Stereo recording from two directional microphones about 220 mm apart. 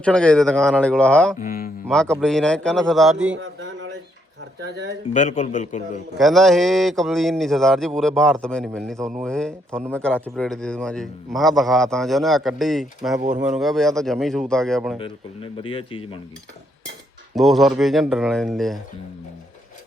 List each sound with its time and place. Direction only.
0.0 s a man's voice: 5° left (ahead or behind)
1.4 s speech: 40° left (ahead or behind)
1.9 s a man's voice: 5° left (ahead or behind)
3.3 s a sound: 60° right (ahead or behind)
5.1 s speech: 35° left (ahead or behind)
6.1 s a man's voice: centre (ahead or behind)
14.9 s speech: 25° left (ahead or behind)
17.3 s a man's voice: centre (ahead or behind)